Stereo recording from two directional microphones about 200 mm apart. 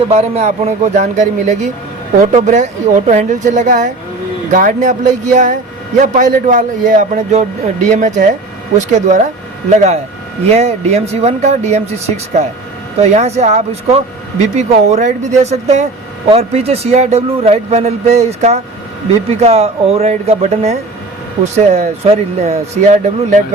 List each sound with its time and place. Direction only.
0.1 s speech: 30° right (ahead or behind)